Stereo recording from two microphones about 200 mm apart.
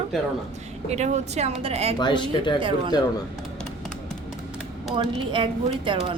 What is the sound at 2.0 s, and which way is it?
Speech, 25° left (ahead or behind).